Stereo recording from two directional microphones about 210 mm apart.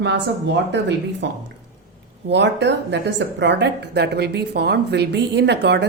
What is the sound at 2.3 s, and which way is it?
A woman's voice, 55° right (ahead or behind).